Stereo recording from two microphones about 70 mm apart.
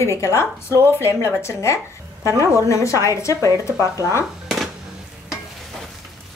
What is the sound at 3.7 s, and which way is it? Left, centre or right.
Speech, right.